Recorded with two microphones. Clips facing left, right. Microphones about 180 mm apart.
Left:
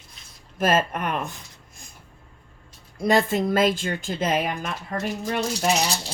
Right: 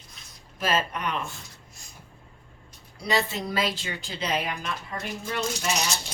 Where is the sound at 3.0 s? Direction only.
50° left (ahead or behind).